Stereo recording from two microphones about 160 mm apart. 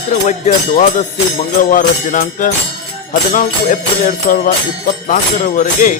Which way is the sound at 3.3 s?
55° left (ahead or behind).